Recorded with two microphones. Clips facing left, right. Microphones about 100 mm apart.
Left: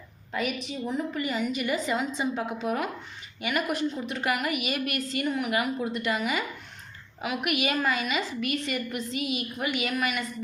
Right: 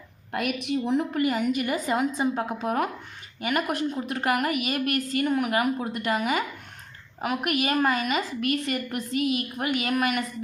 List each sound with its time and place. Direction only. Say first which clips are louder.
0.3 s a woman's voice: right 3 dB; 60° right (ahead or behind)